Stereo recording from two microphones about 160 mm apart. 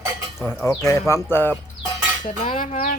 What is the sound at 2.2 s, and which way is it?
Cutlery, 50° left (ahead or behind).